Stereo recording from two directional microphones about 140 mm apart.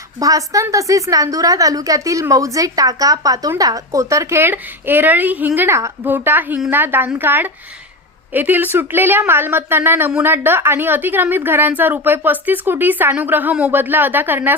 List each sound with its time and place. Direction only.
0.2 s a woman's voice: 25° right (ahead or behind)